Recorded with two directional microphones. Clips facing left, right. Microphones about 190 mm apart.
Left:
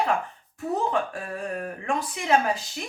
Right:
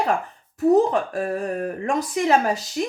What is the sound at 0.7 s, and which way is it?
A woman's voice, 40° right (ahead or behind).